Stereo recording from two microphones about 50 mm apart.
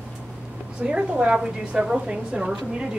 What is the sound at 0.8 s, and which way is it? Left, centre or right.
A woman's voice, right.